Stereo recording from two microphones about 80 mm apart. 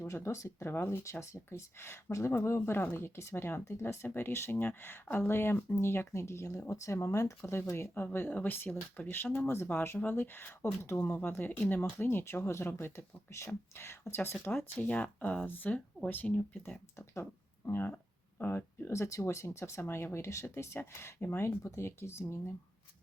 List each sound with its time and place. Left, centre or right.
0.1 s speech: left; by 16.8 s centre
17.7 s speech: left